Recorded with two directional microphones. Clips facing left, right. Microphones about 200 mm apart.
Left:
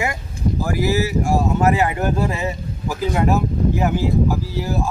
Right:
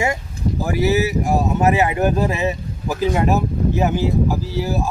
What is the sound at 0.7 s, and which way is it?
Speech, 20° right (ahead or behind).